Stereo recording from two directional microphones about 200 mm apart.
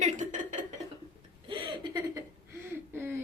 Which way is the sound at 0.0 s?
40° right (ahead or behind).